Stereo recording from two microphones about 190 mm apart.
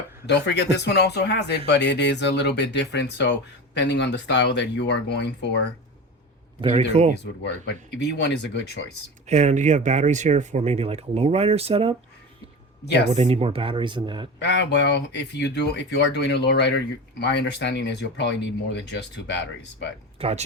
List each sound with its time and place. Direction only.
0.3 s speech: 65° left (ahead or behind)
6.6 s speech: 30° right (ahead or behind)
7.9 s speech: 65° left (ahead or behind)
9.2 s speech: 35° right (ahead or behind)
13.1 s speech: 30° right (ahead or behind)
14.3 s speech: 65° left (ahead or behind)
20.1 s speech: 30° right (ahead or behind)